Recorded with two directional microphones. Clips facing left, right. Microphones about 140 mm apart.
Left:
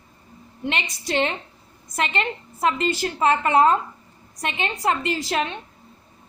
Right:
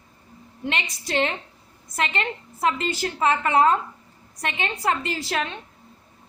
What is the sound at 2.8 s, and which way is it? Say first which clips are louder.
Speech: left 2 dB; 35° left (ahead or behind).